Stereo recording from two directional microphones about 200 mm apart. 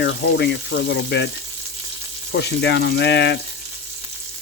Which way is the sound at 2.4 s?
60° left (ahead or behind).